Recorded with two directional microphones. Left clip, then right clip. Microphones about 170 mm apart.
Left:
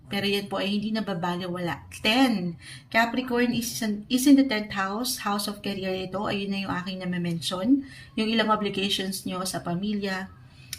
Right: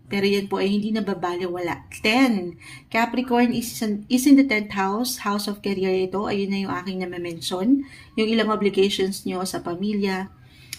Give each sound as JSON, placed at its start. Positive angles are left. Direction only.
{"t": 0.1, "sound": "speech", "side_deg": -30}